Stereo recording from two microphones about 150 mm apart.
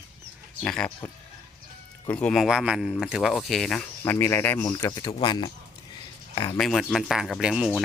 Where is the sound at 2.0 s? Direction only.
10° left (ahead or behind).